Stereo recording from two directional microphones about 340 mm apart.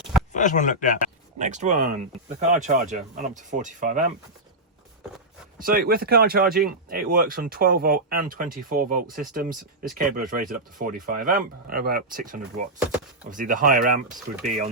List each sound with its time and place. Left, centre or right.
0.3 s speech: left
1.4 s speech: right
5.5 s speech: right